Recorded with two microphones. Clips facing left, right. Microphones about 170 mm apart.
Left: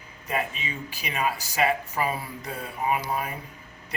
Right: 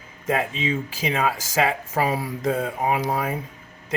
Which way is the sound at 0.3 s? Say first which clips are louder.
Right 7 dB; 90° right.